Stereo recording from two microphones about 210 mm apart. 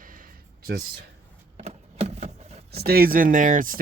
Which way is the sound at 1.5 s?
30° right (ahead or behind).